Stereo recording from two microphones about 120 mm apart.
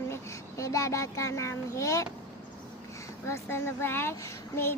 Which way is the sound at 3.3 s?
20° left (ahead or behind).